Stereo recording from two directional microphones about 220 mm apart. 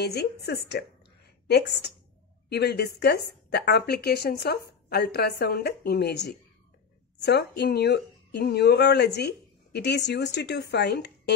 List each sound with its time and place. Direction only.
0.0 s speech: 45° left (ahead or behind)
2.5 s speech: 45° left (ahead or behind)